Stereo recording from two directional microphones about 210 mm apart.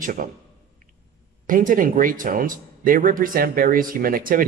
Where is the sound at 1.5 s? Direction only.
40° right (ahead or behind).